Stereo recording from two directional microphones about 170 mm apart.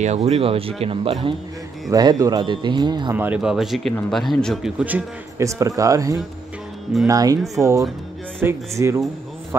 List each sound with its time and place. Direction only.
0.0 s speech: 40° right (ahead or behind)
1.9 s speech: 20° right (ahead or behind)
3.2 s speech: 5° right (ahead or behind)